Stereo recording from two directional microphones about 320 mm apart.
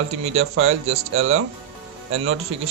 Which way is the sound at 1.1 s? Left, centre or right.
Right.